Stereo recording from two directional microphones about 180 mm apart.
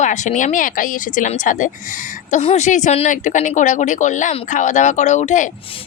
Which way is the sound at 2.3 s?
40° left (ahead or behind).